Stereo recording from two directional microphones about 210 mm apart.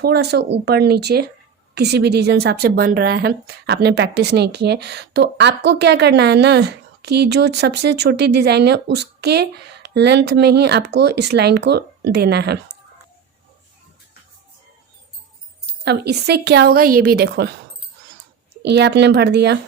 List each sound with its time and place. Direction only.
0.0 s speech: 50° right (ahead or behind)
15.8 s speech: 50° right (ahead or behind)
18.6 s speech: 55° right (ahead or behind)